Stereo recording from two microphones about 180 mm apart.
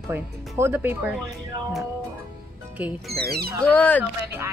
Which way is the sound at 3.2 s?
60° right (ahead or behind).